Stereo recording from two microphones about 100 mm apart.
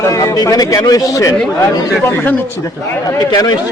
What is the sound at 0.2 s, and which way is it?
Speech, 40° left (ahead or behind).